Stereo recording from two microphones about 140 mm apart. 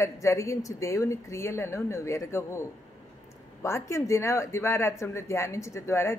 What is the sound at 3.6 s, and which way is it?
A woman's voice, 20° left (ahead or behind).